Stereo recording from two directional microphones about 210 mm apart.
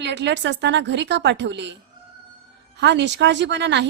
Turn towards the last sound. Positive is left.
turn(degrees=-55)  # may be behind; listen again after turning